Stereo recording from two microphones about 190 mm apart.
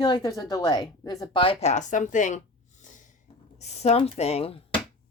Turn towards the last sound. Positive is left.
turn(degrees=30)  # may be behind; listen again after turning